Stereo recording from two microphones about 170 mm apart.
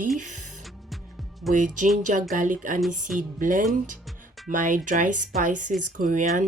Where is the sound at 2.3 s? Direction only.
50° right (ahead or behind).